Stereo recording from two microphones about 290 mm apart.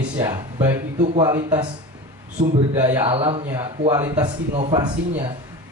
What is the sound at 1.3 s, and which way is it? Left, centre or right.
Speech, centre.